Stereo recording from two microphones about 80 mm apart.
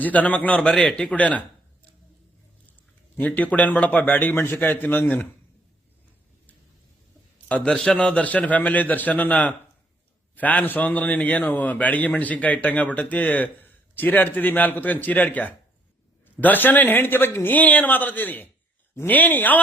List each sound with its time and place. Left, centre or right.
0.0 s a man's voice: centre
3.2 s a man's voice: centre
7.4 s a man's voice: centre